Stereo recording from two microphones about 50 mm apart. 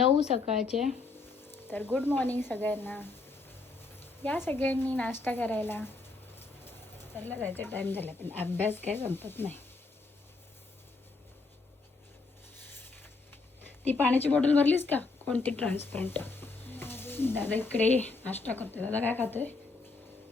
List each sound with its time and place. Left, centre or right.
0.0 s a woman's voice: centre
1.4 s a sound: left
1.7 s speech: left
6.4 s bird: left
7.3 s speech: left
12.6 s a sound: left
14.0 s a woman's voice: left
15.7 s a woman's voice: left